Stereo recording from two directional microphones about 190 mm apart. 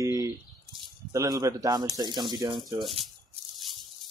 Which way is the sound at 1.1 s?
15° right (ahead or behind).